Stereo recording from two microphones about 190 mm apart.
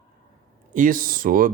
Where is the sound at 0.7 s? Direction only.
45° right (ahead or behind).